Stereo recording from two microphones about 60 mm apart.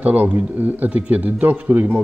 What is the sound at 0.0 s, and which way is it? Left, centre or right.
Speech, right.